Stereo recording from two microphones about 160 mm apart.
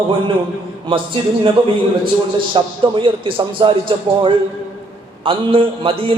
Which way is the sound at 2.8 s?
30° right (ahead or behind).